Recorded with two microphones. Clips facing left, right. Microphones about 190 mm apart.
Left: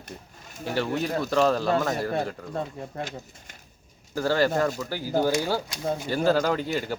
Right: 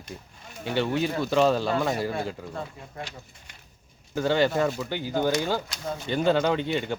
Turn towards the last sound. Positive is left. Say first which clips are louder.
# right 1 dB
turn(degrees=5)  # may be behind; listen again after turning